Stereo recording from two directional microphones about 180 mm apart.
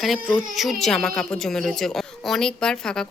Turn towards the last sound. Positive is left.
turn(degrees=5)  # may be behind; listen again after turning